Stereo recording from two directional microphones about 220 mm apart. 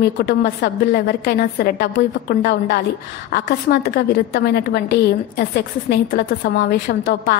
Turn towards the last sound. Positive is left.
turn(degrees=45)  # may be behind; listen again after turning